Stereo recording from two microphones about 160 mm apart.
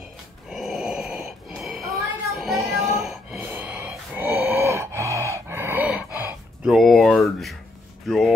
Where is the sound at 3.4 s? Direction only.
10° right (ahead or behind).